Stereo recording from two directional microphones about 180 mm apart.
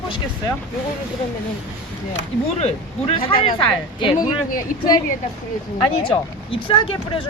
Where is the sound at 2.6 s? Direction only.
35° left (ahead or behind).